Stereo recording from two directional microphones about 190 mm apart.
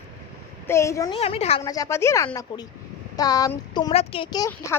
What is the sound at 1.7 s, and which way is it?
A woman's voice, 15° left (ahead or behind).